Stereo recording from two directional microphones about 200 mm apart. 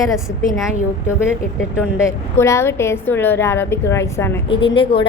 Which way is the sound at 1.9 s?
15° left (ahead or behind).